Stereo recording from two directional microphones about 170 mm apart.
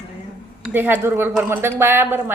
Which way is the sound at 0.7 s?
10° right (ahead or behind).